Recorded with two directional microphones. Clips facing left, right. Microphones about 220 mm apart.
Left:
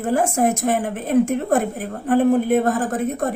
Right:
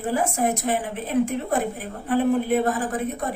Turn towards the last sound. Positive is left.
turn(degrees=45)  # may be behind; listen again after turning